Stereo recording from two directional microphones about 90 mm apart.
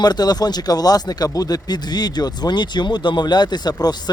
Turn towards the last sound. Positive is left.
turn(degrees=50)  # may be behind; listen again after turning